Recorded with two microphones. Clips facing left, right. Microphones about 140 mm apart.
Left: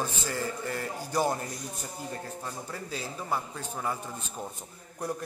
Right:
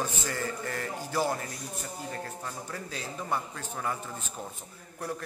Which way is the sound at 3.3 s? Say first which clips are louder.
Left 1 dB; 10° left (ahead or behind).